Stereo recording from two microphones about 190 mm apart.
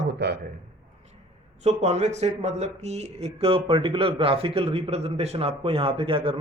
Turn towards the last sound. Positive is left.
turn(degrees=-30)  # may be behind; listen again after turning